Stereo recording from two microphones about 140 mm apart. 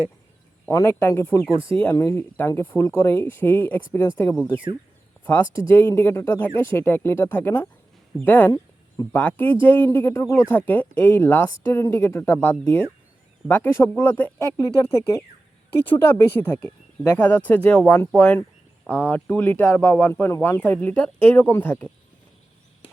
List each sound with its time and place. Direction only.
0.7 s speech: 20° left (ahead or behind)
5.6 s speech: 15° left (ahead or behind)